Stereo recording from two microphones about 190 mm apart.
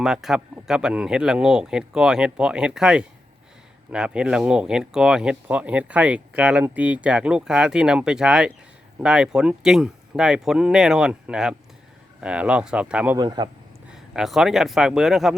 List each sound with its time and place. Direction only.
0.0 s speech: centre (ahead or behind)
13.1 s a man's voice: 20° right (ahead or behind)
13.9 s speech: centre (ahead or behind)